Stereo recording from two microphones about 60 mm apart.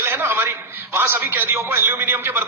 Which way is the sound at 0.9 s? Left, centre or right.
Right.